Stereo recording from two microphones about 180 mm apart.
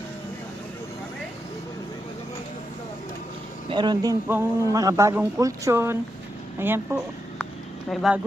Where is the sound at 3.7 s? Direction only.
25° right (ahead or behind).